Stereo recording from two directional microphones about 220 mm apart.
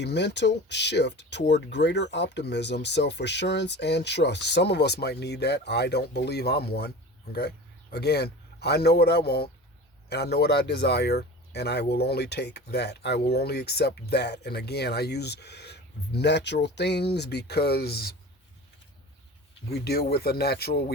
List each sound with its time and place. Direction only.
0.0 s a man's voice: 50° left (ahead or behind)
19.7 s speech: 45° left (ahead or behind)